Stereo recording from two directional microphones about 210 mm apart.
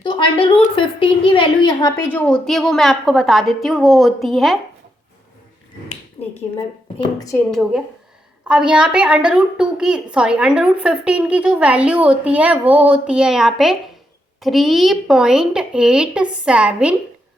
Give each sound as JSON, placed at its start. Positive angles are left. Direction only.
{"t": 0.0, "sound": "a woman's voice", "side_deg": 25}
{"t": 6.2, "sound": "speech", "side_deg": 30}
{"t": 7.2, "sound": "a woman's voice", "side_deg": 15}
{"t": 7.5, "sound": "a woman's voice", "side_deg": 0}